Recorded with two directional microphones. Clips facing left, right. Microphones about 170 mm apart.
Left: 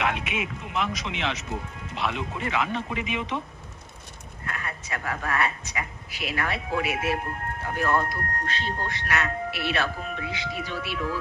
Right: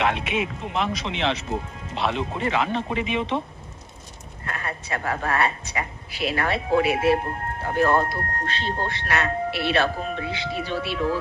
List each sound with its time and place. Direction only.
0.0 s speech: 30° right (ahead or behind)
4.4 s speech: 30° right (ahead or behind)